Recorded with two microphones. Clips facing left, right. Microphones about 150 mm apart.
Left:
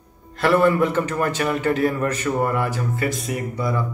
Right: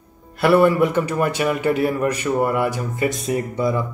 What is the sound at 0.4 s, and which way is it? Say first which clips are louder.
Speech: right 2 dB; 10° right (ahead or behind).